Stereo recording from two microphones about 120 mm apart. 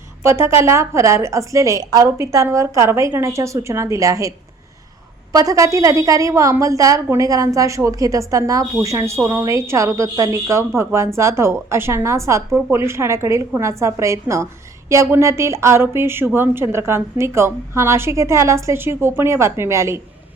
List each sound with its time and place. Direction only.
0.2 s a woman's voice: 20° right (ahead or behind)